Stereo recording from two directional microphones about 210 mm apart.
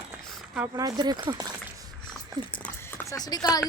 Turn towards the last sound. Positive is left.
turn(degrees=20)  # may be behind; listen again after turning